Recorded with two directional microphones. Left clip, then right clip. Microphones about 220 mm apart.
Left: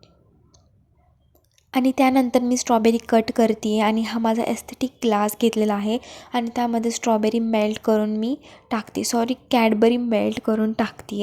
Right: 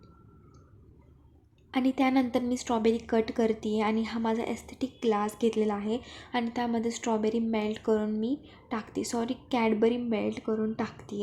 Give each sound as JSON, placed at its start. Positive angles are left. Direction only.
{"t": 1.7, "sound": "a woman's voice", "side_deg": 30}